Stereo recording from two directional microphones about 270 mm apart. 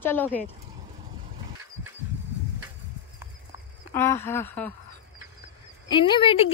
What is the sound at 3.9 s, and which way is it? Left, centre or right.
Speech, centre.